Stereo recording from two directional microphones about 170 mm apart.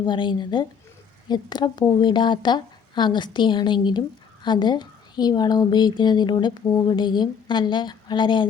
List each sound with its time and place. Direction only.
0.0 s a woman's voice: 25° left (ahead or behind)